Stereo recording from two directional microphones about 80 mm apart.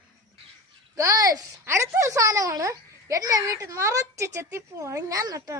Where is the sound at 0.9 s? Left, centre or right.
Right.